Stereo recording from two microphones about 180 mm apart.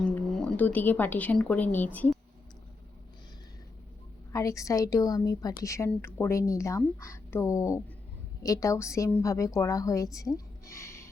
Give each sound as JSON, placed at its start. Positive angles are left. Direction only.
{"t": 0.0, "sound": "speech", "side_deg": 5}
{"t": 4.3, "sound": "a woman's voice", "side_deg": 15}
{"t": 10.2, "sound": "a sound", "side_deg": 20}